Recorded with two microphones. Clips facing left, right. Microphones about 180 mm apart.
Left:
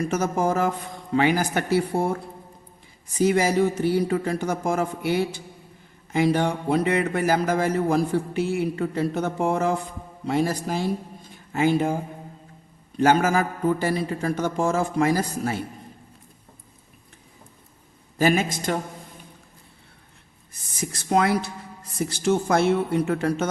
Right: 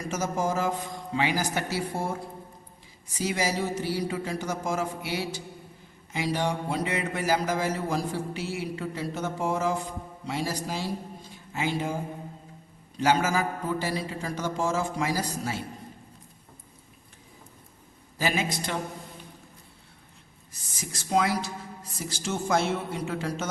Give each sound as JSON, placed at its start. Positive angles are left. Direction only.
{"t": 0.1, "sound": "a man's voice", "side_deg": 60}
{"t": 3.2, "sound": "a man's voice", "side_deg": 55}
{"t": 13.0, "sound": "a man's voice", "side_deg": 55}
{"t": 18.2, "sound": "a man's voice", "side_deg": 50}
{"t": 20.7, "sound": "a man's voice", "side_deg": 55}